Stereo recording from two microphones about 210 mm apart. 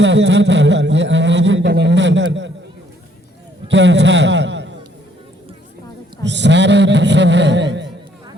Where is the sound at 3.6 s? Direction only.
60° right (ahead or behind).